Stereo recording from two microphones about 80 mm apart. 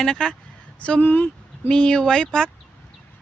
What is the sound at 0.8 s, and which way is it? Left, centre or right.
Speech, left.